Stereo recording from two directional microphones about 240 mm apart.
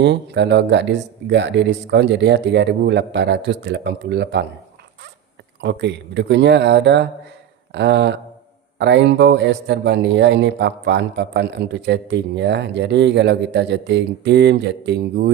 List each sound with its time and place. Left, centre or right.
0.0 s speech: right
5.5 s speech: right